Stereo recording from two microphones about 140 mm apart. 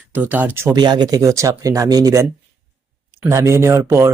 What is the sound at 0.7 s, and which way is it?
Speech, 30° right (ahead or behind).